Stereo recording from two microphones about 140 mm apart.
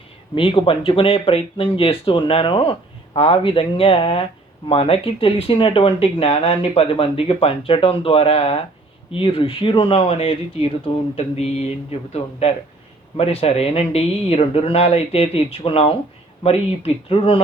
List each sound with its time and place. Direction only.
0.3 s speech: 40° left (ahead or behind)